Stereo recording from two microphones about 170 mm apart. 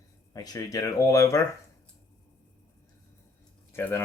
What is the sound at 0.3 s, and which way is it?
Speech, 20° left (ahead or behind).